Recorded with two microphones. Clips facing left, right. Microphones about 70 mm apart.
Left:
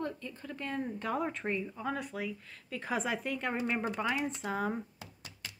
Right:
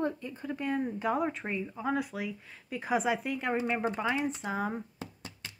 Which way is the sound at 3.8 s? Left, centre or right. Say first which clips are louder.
Right 3 dB; right.